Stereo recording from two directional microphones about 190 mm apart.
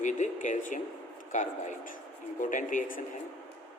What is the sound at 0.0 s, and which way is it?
Speech, 40° left (ahead or behind).